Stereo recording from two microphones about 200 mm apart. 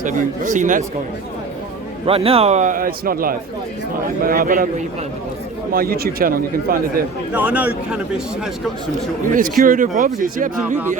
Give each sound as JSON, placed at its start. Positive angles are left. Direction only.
{"t": 0.0, "sound": "a man's voice", "side_deg": -40}
{"t": 2.0, "sound": "a man's voice", "side_deg": -30}
{"t": 7.3, "sound": "a man's voice", "side_deg": -5}
{"t": 9.3, "sound": "a man's voice", "side_deg": -45}